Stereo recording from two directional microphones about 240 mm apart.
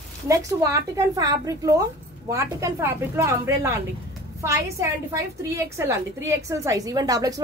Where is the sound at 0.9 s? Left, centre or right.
Centre.